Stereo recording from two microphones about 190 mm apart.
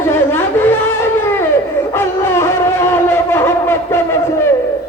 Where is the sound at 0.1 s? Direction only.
10° left (ahead or behind).